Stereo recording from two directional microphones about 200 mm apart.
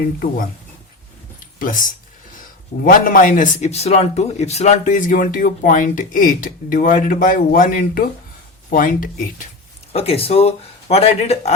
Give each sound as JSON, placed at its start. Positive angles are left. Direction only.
{"t": 1.5, "sound": "speech", "side_deg": 40}
{"t": 9.9, "sound": "speech", "side_deg": 30}